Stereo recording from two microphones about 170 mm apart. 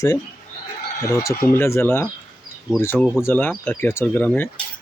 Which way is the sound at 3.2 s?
15° left (ahead or behind).